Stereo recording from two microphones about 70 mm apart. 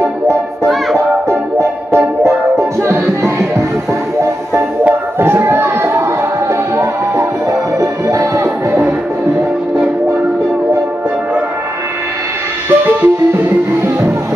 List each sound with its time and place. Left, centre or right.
1.6 s music: right
5.2 s a sound: right
12.6 s music: right